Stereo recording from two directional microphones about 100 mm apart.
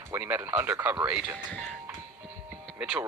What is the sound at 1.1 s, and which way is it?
Speech, 5° right (ahead or behind).